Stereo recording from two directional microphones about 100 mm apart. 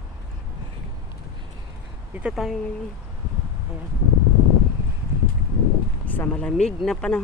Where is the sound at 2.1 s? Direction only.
10° right (ahead or behind).